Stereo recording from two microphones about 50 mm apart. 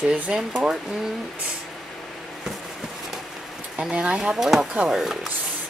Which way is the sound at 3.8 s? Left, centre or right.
Right.